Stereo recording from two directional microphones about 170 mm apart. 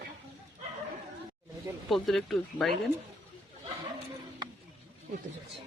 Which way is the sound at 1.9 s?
Centre (ahead or behind).